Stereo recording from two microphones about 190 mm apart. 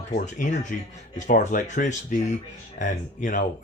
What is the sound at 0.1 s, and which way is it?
Speech, 40° left (ahead or behind).